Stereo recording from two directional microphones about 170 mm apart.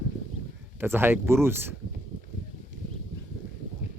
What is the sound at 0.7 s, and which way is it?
Speech, 15° right (ahead or behind).